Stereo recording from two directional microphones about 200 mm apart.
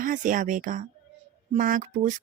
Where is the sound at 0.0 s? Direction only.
40° right (ahead or behind).